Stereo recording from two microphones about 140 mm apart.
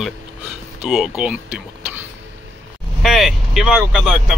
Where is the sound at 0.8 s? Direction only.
5° right (ahead or behind).